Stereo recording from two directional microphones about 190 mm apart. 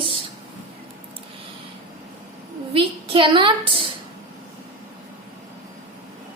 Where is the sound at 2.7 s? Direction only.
30° right (ahead or behind).